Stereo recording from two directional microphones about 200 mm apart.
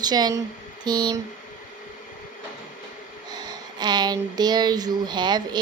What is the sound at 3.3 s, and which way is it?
Speech, 20° right (ahead or behind).